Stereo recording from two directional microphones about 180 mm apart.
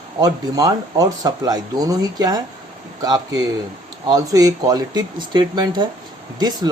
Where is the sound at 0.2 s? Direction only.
20° right (ahead or behind).